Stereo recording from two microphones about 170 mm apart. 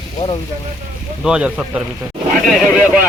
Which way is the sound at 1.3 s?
5° right (ahead or behind).